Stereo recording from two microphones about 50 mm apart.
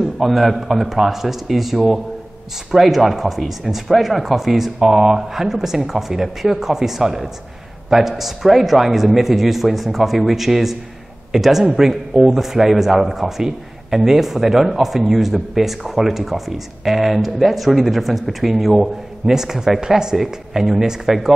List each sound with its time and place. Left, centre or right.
0.2 s a man's voice: centre